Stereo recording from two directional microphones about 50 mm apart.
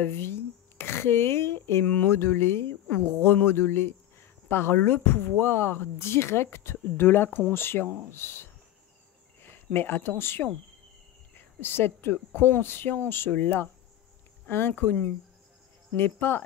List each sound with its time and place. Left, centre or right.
0.0 s speech: left
11.6 s speech: left
14.7 s speech: left